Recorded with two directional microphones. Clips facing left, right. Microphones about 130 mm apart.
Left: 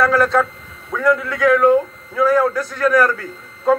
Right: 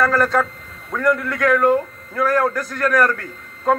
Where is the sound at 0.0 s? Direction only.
Centre (ahead or behind).